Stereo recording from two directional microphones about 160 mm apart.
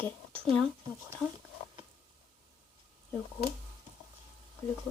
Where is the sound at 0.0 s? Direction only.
5° left (ahead or behind).